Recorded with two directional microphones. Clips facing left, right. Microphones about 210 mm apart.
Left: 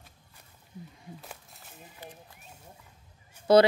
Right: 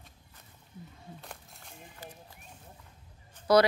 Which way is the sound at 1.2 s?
5° left (ahead or behind).